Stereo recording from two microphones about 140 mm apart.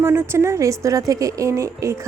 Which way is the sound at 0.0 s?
15° right (ahead or behind).